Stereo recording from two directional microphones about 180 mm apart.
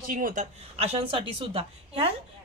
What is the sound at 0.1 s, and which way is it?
Speech, 45° right (ahead or behind).